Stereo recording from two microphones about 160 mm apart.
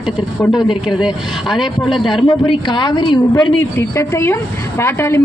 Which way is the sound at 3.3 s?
15° left (ahead or behind).